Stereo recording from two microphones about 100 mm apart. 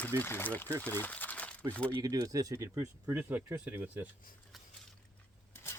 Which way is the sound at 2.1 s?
35° right (ahead or behind).